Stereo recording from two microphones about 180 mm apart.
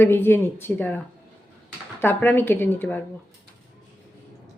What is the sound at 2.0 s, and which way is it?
A woman's voice, 10° left (ahead or behind).